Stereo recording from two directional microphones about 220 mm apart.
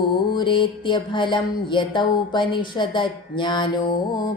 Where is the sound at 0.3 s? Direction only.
20° left (ahead or behind).